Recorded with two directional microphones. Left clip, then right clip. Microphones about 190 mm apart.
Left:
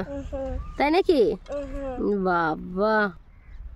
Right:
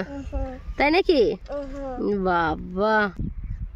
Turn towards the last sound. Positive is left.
turn(degrees=0)  # may be behind; listen again after turning